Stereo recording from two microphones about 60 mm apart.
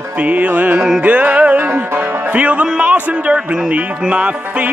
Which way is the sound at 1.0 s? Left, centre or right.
Right.